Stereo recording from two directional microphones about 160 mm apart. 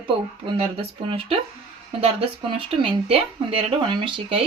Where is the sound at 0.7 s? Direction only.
35° right (ahead or behind).